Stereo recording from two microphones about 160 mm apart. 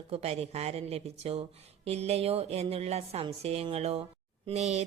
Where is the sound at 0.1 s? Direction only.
40° right (ahead or behind).